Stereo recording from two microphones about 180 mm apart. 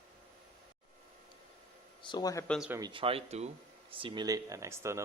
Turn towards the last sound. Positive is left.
turn(degrees=-15)  # may be behind; listen again after turning